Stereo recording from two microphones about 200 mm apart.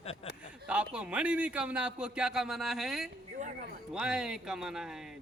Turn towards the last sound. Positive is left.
turn(degrees=0)  # may be behind; listen again after turning